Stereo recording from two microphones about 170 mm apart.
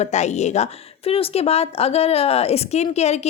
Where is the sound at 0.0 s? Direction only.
40° left (ahead or behind).